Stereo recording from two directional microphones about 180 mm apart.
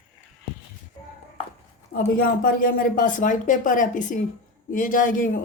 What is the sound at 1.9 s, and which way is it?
A woman's voice, 50° left (ahead or behind).